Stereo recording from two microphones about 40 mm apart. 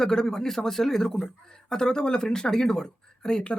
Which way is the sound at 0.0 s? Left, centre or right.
Centre.